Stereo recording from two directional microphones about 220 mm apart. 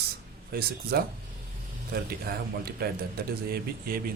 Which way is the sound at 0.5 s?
45° right (ahead or behind).